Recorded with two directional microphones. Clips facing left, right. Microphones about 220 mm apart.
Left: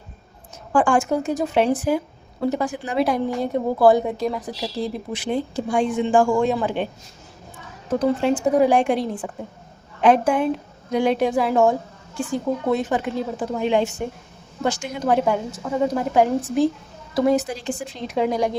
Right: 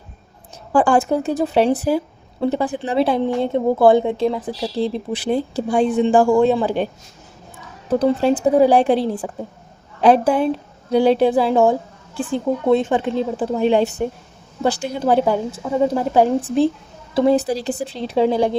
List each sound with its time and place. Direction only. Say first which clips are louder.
0.7 s a woman's voice: right 3 dB; 35° right (ahead or behind)
7.9 s a woman's voice: right 3 dB; 35° right (ahead or behind)